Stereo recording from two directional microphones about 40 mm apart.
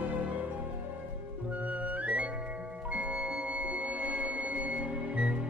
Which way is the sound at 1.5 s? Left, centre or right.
Right.